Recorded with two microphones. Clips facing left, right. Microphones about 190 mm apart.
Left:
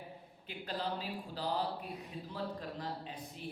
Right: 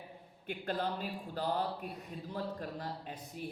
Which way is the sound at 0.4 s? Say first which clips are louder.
Right 4 dB; 50° right (ahead or behind).